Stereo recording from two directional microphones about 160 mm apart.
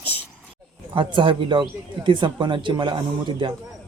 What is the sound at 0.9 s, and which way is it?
Speech, 30° right (ahead or behind).